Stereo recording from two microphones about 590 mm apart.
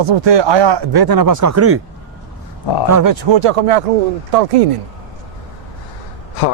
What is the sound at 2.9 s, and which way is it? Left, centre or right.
Speech, right.